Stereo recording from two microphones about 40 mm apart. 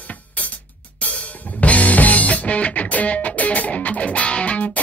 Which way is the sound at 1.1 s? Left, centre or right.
Left.